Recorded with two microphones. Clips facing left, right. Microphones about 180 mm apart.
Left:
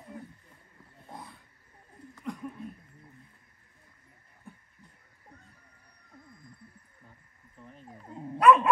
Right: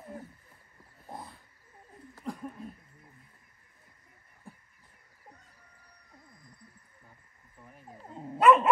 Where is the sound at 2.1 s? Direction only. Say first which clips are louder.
Left 1 dB; 30° right (ahead or behind).